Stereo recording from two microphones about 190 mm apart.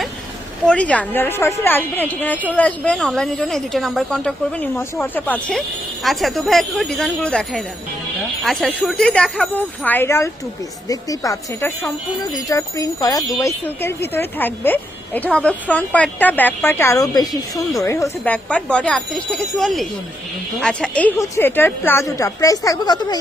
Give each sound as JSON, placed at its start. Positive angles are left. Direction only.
{"t": 0.6, "sound": "a woman's voice", "side_deg": 5}